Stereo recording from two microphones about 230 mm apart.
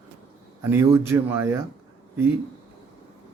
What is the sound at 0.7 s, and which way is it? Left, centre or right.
Speech, centre.